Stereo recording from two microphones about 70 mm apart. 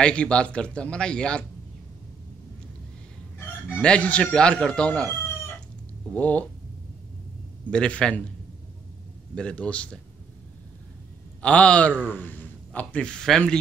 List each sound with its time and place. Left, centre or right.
0.0 s a man's voice: centre
3.8 s a man's voice: centre
6.1 s a man's voice: left
7.7 s a man's voice: centre
9.3 s a man's voice: centre
11.4 s a man's voice: centre